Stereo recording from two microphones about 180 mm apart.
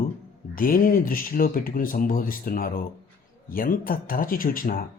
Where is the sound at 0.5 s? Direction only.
50° left (ahead or behind).